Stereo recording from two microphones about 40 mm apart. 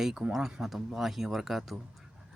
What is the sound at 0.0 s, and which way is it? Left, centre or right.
A man's voice, centre.